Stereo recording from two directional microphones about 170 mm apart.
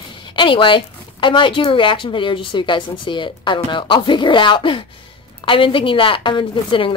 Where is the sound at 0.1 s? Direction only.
30° left (ahead or behind).